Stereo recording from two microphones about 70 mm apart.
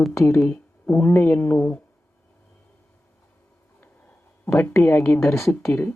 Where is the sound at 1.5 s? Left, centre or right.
Centre.